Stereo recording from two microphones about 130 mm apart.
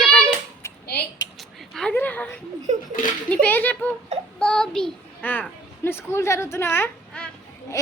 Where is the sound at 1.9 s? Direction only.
15° left (ahead or behind).